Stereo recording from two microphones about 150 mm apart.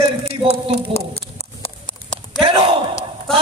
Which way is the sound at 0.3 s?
45° right (ahead or behind).